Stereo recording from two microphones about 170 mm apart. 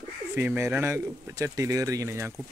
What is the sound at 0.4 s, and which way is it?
Speech, 10° right (ahead or behind).